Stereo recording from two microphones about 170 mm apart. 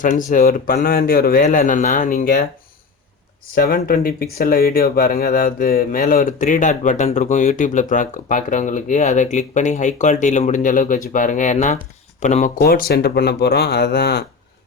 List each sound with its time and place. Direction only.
0.0 s speech: 50° left (ahead or behind)
3.5 s speech: 60° left (ahead or behind); by 12.5 s 45° left (ahead or behind)
12.5 s speech: 65° left (ahead or behind)